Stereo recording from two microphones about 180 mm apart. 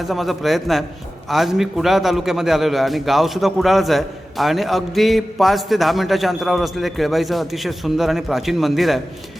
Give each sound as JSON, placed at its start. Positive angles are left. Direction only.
{"t": 0.0, "sound": "a man's voice", "side_deg": 0}